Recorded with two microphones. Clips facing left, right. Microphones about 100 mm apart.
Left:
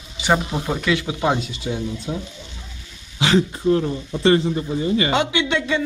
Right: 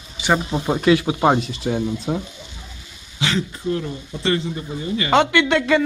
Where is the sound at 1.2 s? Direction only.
50° right (ahead or behind).